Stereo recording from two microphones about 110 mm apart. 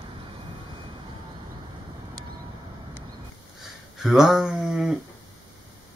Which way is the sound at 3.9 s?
5° right (ahead or behind).